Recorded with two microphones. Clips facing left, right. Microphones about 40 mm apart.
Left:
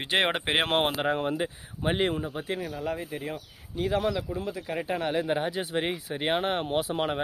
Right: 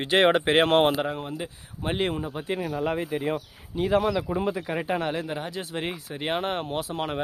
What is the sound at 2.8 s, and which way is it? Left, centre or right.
Speech, right.